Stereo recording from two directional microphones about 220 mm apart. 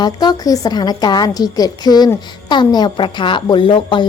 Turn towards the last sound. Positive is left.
turn(degrees=25)  # may be behind; listen again after turning